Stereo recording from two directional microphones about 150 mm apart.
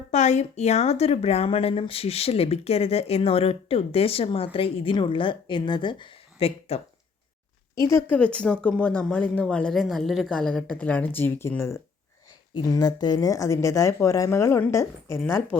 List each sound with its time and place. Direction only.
0.1 s speech: 50° left (ahead or behind)
7.9 s speech: 15° left (ahead or behind)